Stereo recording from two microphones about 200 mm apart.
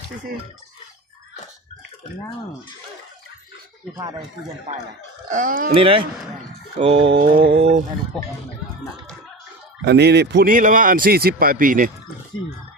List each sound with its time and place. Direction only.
5.3 s speech: 40° right (ahead or behind)
5.7 s a sound: 25° right (ahead or behind)
8.1 s speech: centre (ahead or behind)
9.8 s a man's voice: 55° right (ahead or behind)